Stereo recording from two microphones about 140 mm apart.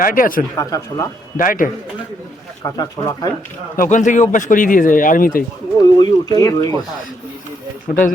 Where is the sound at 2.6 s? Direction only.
25° left (ahead or behind).